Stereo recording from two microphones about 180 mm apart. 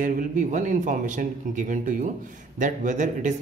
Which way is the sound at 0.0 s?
45° right (ahead or behind).